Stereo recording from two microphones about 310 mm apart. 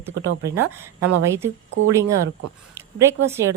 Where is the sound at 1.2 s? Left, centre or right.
Centre.